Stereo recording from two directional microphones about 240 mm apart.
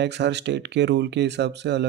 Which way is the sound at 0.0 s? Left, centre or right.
Right.